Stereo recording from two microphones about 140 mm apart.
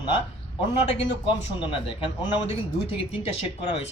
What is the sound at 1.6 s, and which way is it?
Speech, 35° left (ahead or behind).